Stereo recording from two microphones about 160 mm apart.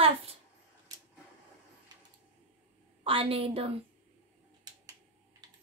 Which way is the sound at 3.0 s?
35° right (ahead or behind).